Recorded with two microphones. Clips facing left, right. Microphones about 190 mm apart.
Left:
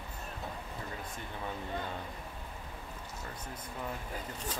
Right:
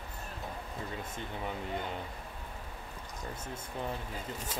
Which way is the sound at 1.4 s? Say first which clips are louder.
Right 1 dB; 20° right (ahead or behind).